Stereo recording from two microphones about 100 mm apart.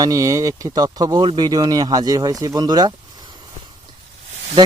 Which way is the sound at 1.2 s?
50° right (ahead or behind).